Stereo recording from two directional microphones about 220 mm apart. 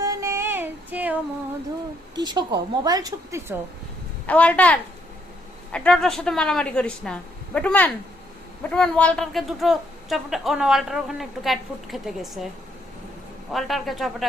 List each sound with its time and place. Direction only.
0.0 s music: 15° right (ahead or behind)
2.1 s a woman's voice: 20° right (ahead or behind)
4.3 s a woman's voice: 5° left (ahead or behind)
13.5 s speech: centre (ahead or behind)